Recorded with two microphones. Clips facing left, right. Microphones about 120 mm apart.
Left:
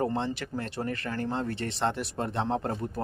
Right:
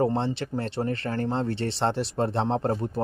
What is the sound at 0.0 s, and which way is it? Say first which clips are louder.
Speech: right 4 dB; 30° right (ahead or behind).